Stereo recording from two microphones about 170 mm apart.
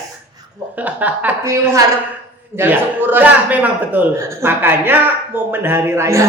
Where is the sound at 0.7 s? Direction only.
10° right (ahead or behind).